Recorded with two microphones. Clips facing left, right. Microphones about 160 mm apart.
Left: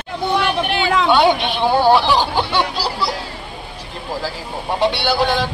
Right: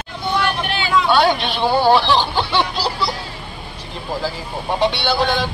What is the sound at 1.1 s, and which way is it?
Speech, 15° left (ahead or behind).